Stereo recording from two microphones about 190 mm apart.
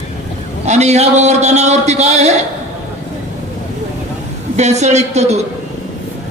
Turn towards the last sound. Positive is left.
turn(degrees=-35)  # may be behind; listen again after turning